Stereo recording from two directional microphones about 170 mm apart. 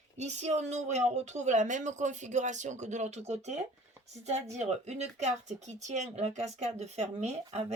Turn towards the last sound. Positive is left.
turn(degrees=-40)  # may be behind; listen again after turning